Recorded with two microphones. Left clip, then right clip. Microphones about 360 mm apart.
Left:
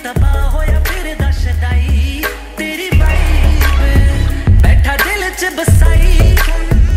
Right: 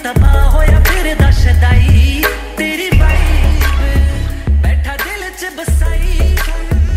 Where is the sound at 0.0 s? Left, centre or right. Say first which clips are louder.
Right 4 dB; right.